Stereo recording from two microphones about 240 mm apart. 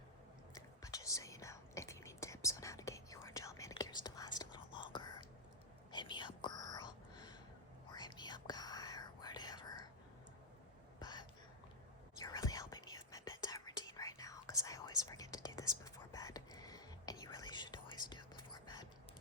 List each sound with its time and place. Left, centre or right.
0.5 s whispering: centre
11.0 s a sound: centre
12.1 s whispering: centre